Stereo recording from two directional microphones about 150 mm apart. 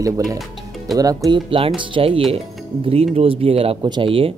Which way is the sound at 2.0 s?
35° right (ahead or behind).